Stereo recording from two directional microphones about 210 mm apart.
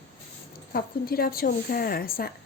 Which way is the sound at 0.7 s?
45° left (ahead or behind).